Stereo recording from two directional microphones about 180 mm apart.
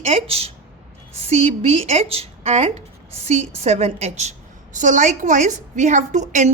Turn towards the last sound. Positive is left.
turn(degrees=-40)  # may be behind; listen again after turning